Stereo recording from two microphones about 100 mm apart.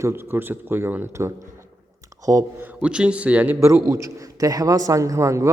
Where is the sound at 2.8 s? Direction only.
10° right (ahead or behind).